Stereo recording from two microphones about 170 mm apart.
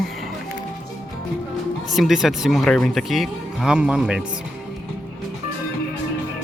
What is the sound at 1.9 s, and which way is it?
Speech, centre (ahead or behind).